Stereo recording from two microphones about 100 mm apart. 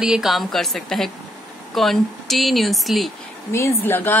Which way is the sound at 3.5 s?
25° left (ahead or behind).